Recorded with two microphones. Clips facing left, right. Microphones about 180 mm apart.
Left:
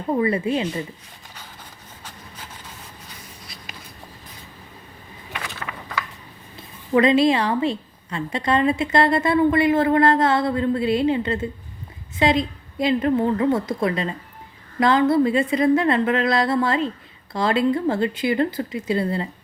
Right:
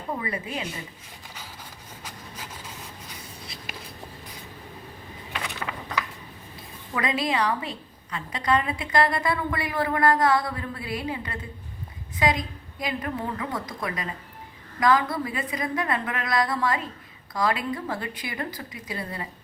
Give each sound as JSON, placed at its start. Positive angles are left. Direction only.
{"t": 0.2, "sound": "a woman's voice", "side_deg": 30}
{"t": 6.9, "sound": "a woman's voice", "side_deg": 25}